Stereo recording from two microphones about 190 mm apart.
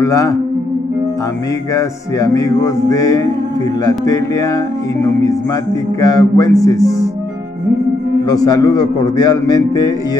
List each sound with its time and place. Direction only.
0.0 s mantra: 15° left (ahead or behind)
1.8 s mantra: 15° left (ahead or behind)
5.9 s mantra: 20° left (ahead or behind)
8.3 s a man's voice: 20° left (ahead or behind)